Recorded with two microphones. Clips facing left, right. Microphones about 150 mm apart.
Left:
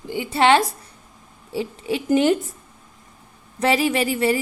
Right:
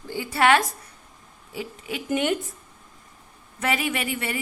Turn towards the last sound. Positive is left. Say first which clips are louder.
# left 9 dB
turn(degrees=35)  # may be behind; listen again after turning